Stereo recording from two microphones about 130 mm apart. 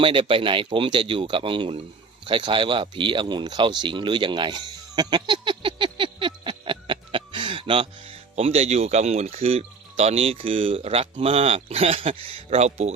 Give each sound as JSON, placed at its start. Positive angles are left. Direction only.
{"t": 0.0, "sound": "speech", "side_deg": -40}